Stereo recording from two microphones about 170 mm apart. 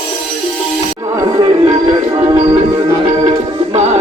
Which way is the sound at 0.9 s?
20° right (ahead or behind).